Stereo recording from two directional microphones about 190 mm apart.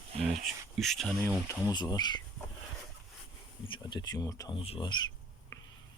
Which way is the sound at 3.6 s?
25° left (ahead or behind).